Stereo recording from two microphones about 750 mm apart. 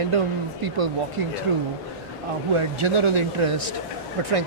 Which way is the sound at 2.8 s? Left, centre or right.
Right.